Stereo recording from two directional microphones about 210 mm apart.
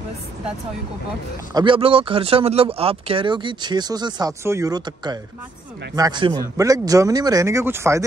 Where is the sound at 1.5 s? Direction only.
25° right (ahead or behind).